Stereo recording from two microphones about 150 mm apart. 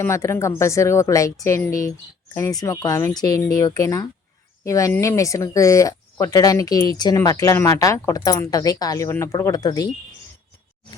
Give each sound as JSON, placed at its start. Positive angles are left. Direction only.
{"t": 0.0, "sound": "speech", "side_deg": 20}